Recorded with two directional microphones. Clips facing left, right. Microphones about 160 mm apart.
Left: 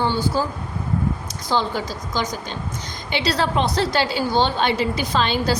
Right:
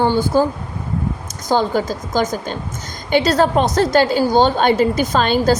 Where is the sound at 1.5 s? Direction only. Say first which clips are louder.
Right 6 dB; 45° right (ahead or behind).